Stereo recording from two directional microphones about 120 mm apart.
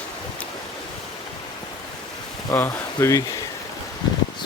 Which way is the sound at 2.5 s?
20° left (ahead or behind).